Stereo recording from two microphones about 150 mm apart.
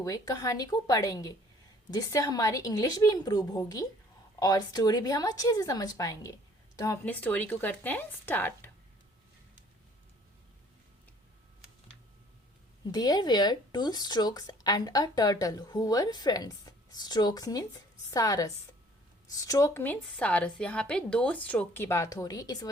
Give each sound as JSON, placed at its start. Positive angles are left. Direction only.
{"t": 0.0, "sound": "a woman's voice", "side_deg": 25}
{"t": 12.9, "sound": "a woman's voice", "side_deg": 25}